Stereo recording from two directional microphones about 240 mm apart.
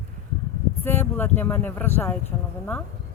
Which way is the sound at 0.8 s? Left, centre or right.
Centre.